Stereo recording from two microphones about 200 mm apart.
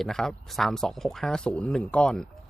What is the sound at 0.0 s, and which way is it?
Speech, centre (ahead or behind).